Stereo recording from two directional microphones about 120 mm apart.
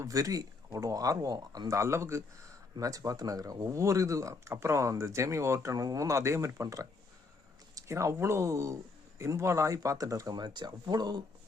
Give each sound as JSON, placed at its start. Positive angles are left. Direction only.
{"t": 0.0, "sound": "speech", "side_deg": -30}